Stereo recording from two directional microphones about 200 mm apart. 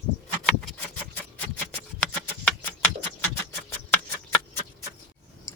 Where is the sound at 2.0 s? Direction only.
5° left (ahead or behind).